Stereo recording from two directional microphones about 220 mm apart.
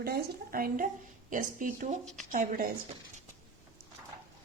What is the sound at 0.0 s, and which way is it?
Speech, 45° right (ahead or behind).